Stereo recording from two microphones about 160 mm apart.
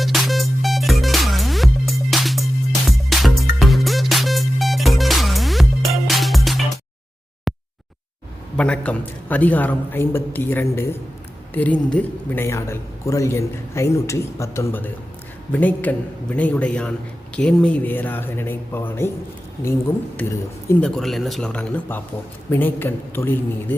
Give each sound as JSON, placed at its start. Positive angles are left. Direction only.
{"t": 0.0, "sound": "music", "side_deg": 0}
{"t": 7.5, "sound": "a sound", "side_deg": 0}
{"t": 8.5, "sound": "speech", "side_deg": 5}
{"t": 20.8, "sound": "speech", "side_deg": 0}